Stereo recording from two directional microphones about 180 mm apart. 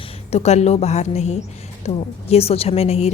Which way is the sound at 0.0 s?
35° left (ahead or behind).